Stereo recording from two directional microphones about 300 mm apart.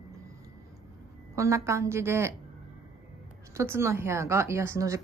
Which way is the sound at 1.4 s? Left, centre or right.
Centre.